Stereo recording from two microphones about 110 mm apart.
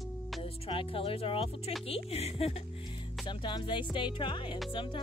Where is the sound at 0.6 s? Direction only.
55° left (ahead or behind).